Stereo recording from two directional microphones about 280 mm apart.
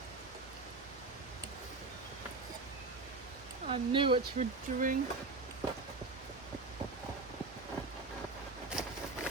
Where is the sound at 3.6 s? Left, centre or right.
Centre.